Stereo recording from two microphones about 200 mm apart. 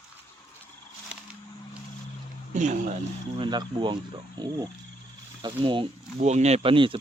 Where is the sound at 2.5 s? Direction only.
35° right (ahead or behind).